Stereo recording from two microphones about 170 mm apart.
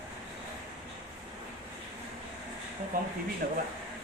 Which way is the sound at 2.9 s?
55° right (ahead or behind).